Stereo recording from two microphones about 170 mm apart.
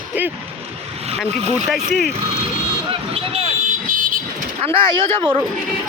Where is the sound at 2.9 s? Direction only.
35° right (ahead or behind).